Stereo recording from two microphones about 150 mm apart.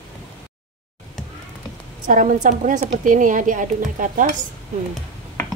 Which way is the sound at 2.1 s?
60° right (ahead or behind).